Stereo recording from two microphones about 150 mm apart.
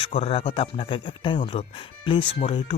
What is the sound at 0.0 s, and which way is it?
Speech, 40° left (ahead or behind).